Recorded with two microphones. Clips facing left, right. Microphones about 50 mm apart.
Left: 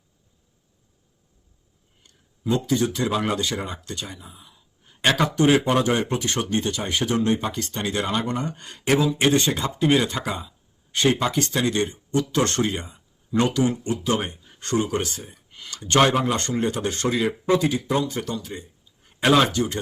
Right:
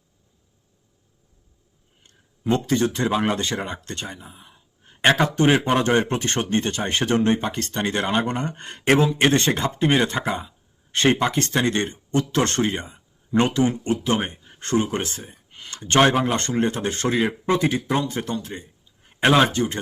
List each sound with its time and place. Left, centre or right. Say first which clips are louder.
2.0 s speech: right 2 dB; right
15.2 s a sound: even; right
16.2 s speech: right 1 dB; right
19.2 s speech: right 1 dB; centre
19.5 s speech: right 1 dB; right